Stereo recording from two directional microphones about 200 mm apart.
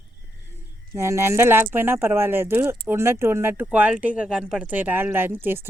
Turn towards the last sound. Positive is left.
turn(degrees=-10)  # may be behind; listen again after turning